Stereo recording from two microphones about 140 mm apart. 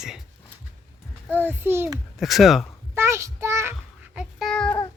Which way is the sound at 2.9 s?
20° right (ahead or behind).